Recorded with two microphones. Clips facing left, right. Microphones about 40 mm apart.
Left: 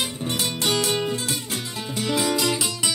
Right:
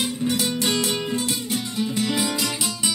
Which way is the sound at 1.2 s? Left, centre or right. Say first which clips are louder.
Right 3 dB; left.